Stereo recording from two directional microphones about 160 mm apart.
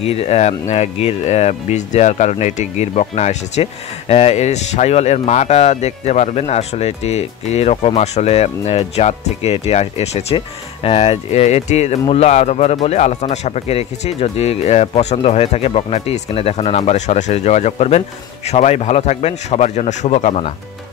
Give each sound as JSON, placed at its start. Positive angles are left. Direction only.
{"t": 0.0, "sound": "speech", "side_deg": 40}